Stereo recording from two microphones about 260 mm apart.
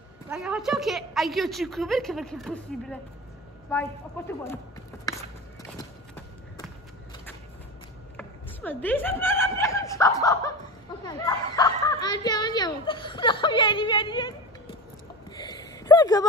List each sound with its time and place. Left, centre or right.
0.3 s a woman's voice: centre
8.2 s snicker: centre
15.3 s a sound: centre